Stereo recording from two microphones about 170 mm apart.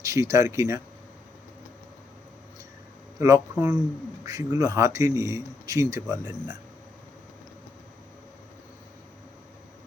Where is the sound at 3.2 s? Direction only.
15° right (ahead or behind).